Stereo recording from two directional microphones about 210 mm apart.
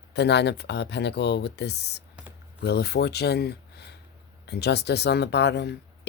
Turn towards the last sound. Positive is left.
turn(degrees=55)  # may be behind; listen again after turning